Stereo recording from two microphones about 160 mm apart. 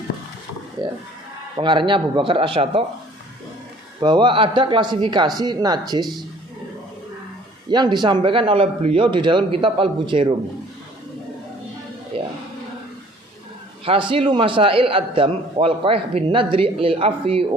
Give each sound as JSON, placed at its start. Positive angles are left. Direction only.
{"t": 1.5, "sound": "a man's voice", "side_deg": -30}
{"t": 4.0, "sound": "a man's voice", "side_deg": -30}
{"t": 7.7, "sound": "a man's voice", "side_deg": -25}
{"t": 12.1, "sound": "speech", "side_deg": -35}
{"t": 13.8, "sound": "a man's voice", "side_deg": -35}